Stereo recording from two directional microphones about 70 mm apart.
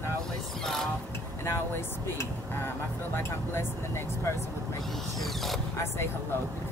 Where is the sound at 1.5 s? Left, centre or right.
Left.